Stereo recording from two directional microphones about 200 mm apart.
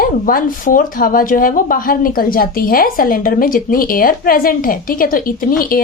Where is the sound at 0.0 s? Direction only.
45° left (ahead or behind).